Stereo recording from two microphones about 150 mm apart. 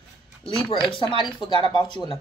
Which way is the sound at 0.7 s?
35° left (ahead or behind).